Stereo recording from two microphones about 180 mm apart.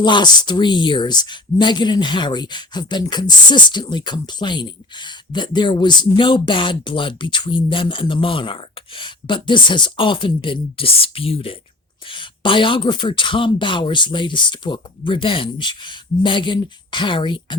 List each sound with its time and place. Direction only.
0.0 s speech: 25° left (ahead or behind)